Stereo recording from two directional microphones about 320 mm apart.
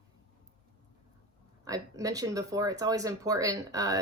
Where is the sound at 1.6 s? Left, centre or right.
Centre.